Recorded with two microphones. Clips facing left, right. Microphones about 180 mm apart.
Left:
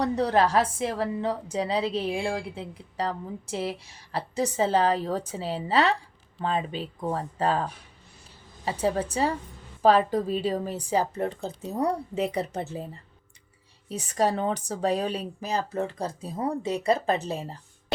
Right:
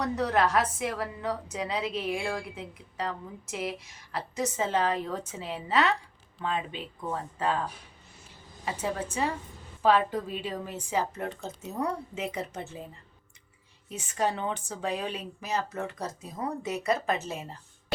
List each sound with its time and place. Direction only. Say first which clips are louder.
0.0 s a woman's voice: left 3 dB; 30° left (ahead or behind)
8.6 s a woman's voice: left 6 dB; 35° left (ahead or behind)
13.9 s a woman's voice: left 4 dB; 35° left (ahead or behind)